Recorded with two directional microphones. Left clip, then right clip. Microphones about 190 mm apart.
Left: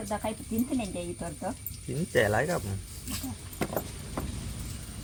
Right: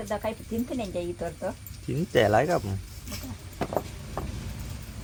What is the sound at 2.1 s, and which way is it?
Speech, 40° right (ahead or behind).